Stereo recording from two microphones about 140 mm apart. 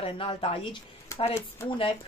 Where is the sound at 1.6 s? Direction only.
40° left (ahead or behind).